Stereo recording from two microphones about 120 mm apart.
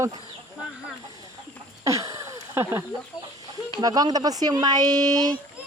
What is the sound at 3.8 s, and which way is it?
Speech, 30° right (ahead or behind).